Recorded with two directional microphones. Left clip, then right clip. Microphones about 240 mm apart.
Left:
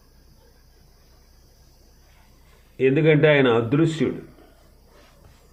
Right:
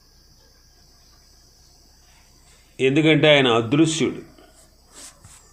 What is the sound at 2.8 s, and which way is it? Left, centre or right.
A man's voice, right.